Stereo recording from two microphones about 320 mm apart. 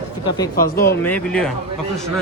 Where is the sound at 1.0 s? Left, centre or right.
Centre.